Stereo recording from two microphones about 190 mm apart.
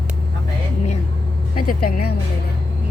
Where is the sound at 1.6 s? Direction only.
50° left (ahead or behind).